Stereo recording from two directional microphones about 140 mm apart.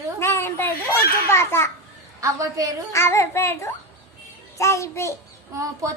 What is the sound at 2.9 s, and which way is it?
A child's voice, 20° left (ahead or behind).